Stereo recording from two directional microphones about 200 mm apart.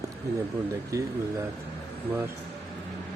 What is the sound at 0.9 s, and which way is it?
Speech, 15° right (ahead or behind).